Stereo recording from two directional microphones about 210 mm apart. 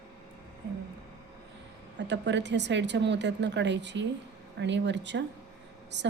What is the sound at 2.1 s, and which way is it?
Speech, 55° right (ahead or behind).